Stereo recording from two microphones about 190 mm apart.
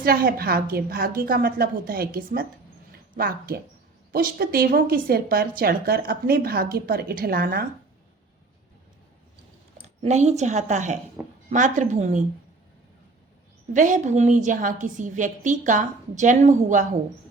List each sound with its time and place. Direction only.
0.0 s a woman's voice: 50° right (ahead or behind)
9.8 s a woman's voice: 35° right (ahead or behind)
13.7 s a woman's voice: 40° right (ahead or behind)